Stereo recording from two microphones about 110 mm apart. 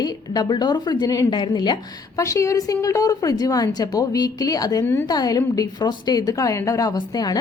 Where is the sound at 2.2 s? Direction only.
30° left (ahead or behind).